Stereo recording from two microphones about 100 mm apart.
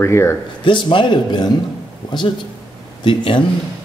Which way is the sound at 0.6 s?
55° left (ahead or behind).